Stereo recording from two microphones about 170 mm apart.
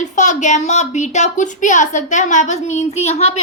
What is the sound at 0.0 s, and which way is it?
Speech, 45° left (ahead or behind).